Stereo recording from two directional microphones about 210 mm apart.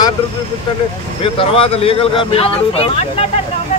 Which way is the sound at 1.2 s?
25° left (ahead or behind).